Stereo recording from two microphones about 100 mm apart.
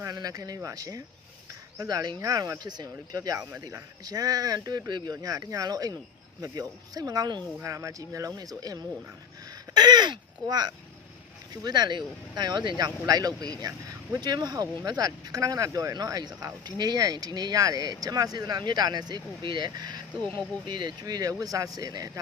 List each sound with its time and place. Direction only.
0.1 s speech: 40° right (ahead or behind)
7.6 s speech: 30° right (ahead or behind)
9.7 s a sound: 45° right (ahead or behind)
11.5 s speech: 45° right (ahead or behind)
21.0 s speech: 35° right (ahead or behind)